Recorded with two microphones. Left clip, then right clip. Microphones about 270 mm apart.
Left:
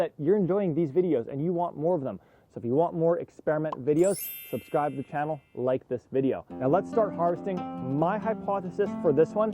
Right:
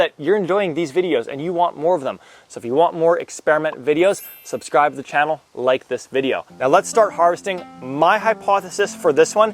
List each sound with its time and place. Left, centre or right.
0.0 s speech: centre